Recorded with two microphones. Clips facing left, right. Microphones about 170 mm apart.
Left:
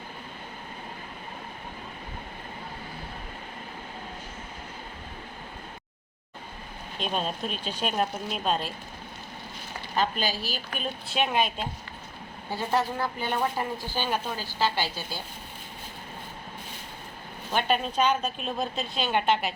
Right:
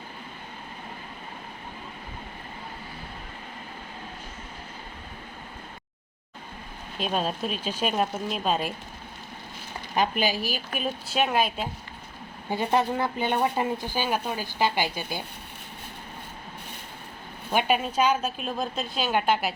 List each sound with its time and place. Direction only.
7.0 s a woman's voice: 5° right (ahead or behind)
9.9 s speech: 15° right (ahead or behind)
12.5 s speech: 20° right (ahead or behind)
17.5 s a woman's voice: 10° right (ahead or behind)